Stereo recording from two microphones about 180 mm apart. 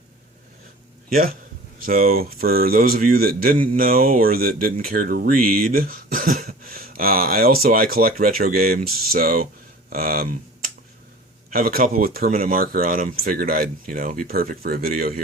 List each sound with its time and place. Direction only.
1.8 s speech: 55° right (ahead or behind)
11.5 s speech: 55° right (ahead or behind)